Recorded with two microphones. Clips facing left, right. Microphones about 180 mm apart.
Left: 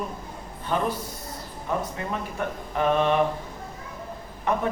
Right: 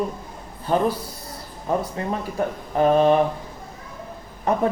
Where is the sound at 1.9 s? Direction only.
35° right (ahead or behind).